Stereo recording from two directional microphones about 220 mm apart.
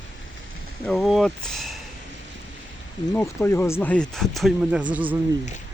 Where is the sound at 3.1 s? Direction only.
10° left (ahead or behind).